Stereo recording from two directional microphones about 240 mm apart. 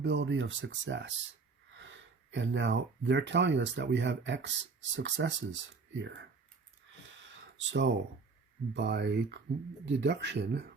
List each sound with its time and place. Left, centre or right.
0.0 s speech: right
6.9 s a sound: right
8.7 s speech: right